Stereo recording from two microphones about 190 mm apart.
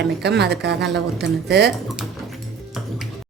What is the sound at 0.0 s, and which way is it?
Speech, 60° right (ahead or behind).